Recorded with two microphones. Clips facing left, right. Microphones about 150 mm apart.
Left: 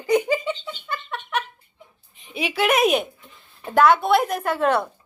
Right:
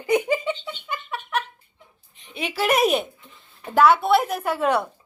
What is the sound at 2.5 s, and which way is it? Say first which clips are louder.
A woman's voice: left 1 dB; centre (ahead or behind).